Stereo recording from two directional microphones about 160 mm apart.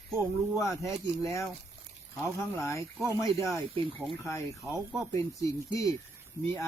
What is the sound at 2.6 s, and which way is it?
Speech, 20° left (ahead or behind).